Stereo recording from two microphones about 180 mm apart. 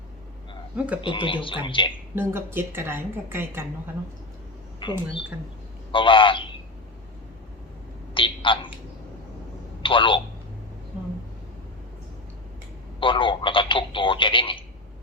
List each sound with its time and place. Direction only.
1.0 s speech: 30° left (ahead or behind)
2.1 s a woman's voice: 15° right (ahead or behind)
4.8 s a man's voice: 25° left (ahead or behind)
8.1 s telephone: 30° left (ahead or behind)
9.8 s telephone: 30° left (ahead or behind)
13.0 s telephone: 30° left (ahead or behind)